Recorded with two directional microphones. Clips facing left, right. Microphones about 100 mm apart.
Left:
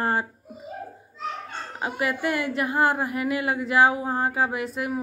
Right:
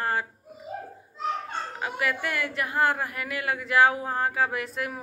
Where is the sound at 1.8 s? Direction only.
25° left (ahead or behind).